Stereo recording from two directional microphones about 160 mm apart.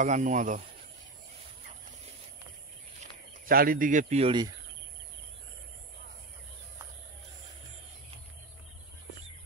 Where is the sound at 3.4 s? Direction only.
65° right (ahead or behind); by 4.3 s 40° right (ahead or behind).